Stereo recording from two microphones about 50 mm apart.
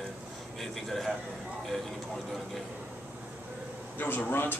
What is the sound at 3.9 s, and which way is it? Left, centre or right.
Speech, left.